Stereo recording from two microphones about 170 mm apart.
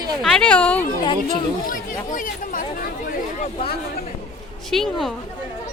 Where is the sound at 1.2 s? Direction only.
55° left (ahead or behind).